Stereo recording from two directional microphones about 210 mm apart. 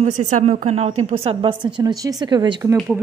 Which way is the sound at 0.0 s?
35° right (ahead or behind).